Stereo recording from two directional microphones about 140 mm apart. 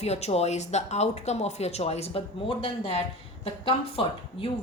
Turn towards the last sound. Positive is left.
turn(degrees=40)  # may be behind; listen again after turning